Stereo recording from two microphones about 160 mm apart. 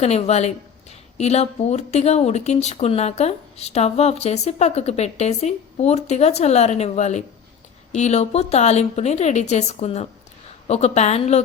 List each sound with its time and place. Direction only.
0.0 s speech: 40° left (ahead or behind)